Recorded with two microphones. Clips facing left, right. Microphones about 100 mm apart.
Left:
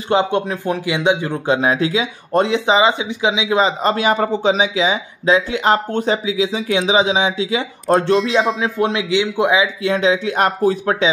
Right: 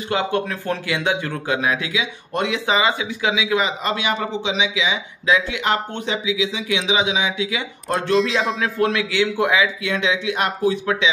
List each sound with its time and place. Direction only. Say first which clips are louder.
0.1 s speech: left 5 dB; 25° left (ahead or behind)
8.5 s a man's voice: left 2 dB; 20° left (ahead or behind)
9.8 s speech: left 5 dB; 35° left (ahead or behind)